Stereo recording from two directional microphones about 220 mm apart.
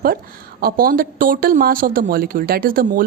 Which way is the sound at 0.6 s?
40° right (ahead or behind).